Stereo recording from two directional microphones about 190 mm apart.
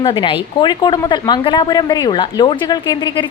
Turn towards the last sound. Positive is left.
turn(degrees=25)  # may be behind; listen again after turning